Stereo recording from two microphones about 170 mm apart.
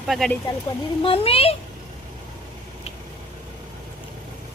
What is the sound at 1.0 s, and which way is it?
Speech, 35° left (ahead or behind).